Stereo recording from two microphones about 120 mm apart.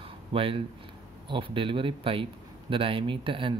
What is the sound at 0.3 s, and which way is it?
Speech, 50° right (ahead or behind).